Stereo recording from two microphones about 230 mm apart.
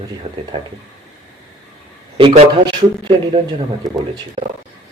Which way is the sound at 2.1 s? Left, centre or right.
Right.